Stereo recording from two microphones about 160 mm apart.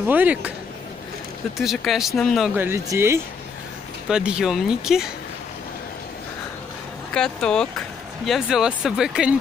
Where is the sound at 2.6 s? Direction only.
15° right (ahead or behind).